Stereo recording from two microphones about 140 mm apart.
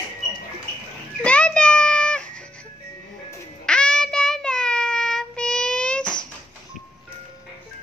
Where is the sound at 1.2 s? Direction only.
10° left (ahead or behind).